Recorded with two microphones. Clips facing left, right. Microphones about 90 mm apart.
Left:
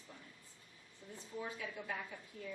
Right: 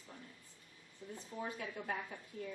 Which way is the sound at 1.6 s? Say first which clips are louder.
Right 2 dB; 50° right (ahead or behind).